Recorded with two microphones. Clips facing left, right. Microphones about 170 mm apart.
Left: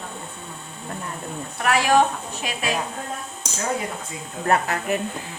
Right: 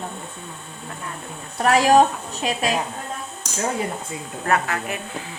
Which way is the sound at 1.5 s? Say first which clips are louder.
Right 4 dB; 35° right (ahead or behind).